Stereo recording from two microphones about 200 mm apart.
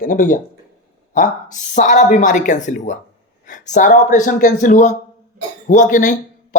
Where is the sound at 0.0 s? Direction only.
40° left (ahead or behind).